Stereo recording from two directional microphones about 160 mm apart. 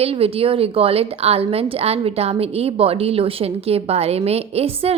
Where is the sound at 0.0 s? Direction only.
40° right (ahead or behind).